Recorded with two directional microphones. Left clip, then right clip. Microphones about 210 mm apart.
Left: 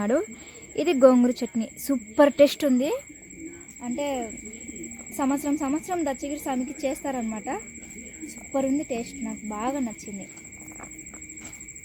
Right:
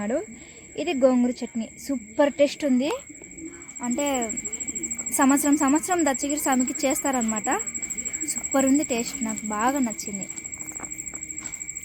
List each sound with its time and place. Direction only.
0.0 s speech: 20° left (ahead or behind)
3.8 s a woman's voice: 10° right (ahead or behind)